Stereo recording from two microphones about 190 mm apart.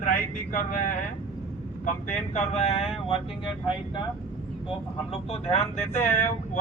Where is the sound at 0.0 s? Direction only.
45° left (ahead or behind).